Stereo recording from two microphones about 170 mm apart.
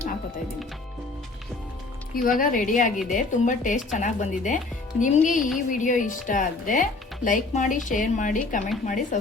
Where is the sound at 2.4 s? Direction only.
55° left (ahead or behind).